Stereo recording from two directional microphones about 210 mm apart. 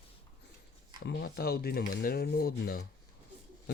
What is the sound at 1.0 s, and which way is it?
Speech, 50° left (ahead or behind).